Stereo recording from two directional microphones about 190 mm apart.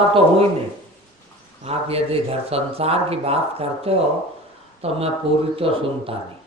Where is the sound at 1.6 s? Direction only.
30° right (ahead or behind).